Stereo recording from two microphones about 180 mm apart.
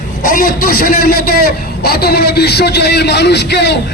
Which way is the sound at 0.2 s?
50° left (ahead or behind).